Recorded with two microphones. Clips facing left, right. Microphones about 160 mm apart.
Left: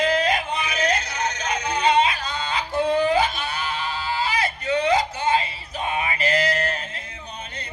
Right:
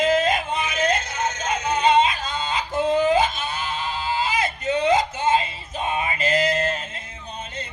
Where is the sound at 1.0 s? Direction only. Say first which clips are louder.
Right 1 dB; 50° right (ahead or behind).